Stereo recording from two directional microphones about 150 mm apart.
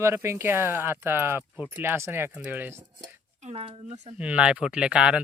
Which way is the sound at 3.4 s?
40° right (ahead or behind).